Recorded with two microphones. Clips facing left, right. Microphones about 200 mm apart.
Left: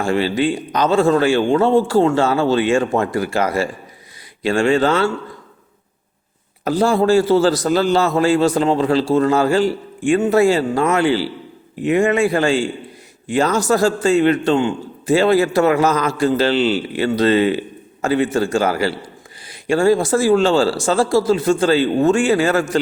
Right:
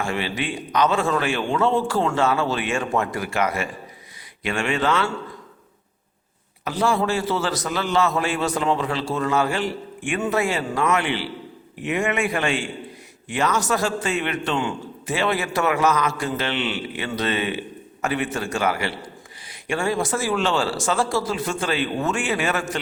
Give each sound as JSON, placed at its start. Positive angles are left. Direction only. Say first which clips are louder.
{"t": 0.0, "sound": "a man's voice", "louder": "left 9 dB", "side_deg": 30}
{"t": 6.7, "sound": "a man's voice", "louder": "left 7 dB", "side_deg": 35}